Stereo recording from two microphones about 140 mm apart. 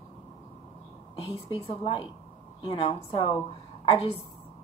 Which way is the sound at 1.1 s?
40° left (ahead or behind).